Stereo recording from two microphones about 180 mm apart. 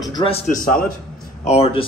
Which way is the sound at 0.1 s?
30° left (ahead or behind).